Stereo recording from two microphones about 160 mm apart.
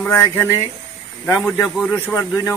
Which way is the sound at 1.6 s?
10° left (ahead or behind).